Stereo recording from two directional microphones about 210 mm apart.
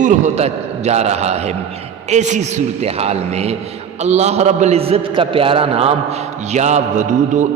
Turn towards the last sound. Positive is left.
turn(degrees=-35)  # may be behind; listen again after turning